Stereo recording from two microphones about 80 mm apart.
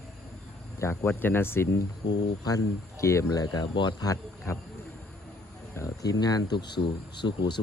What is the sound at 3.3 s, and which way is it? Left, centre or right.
Speech, left.